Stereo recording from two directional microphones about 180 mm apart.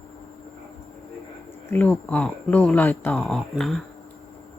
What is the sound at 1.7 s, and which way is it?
Speech, 10° left (ahead or behind).